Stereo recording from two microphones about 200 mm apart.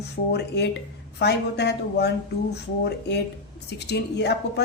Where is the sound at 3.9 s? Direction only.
55° left (ahead or behind).